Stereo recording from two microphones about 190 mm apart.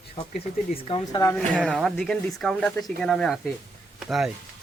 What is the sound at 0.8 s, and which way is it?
Speech, 30° left (ahead or behind).